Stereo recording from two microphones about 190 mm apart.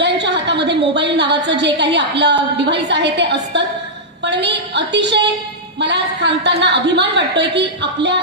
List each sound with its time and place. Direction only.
0.0 s a woman's voice: 65° right (ahead or behind)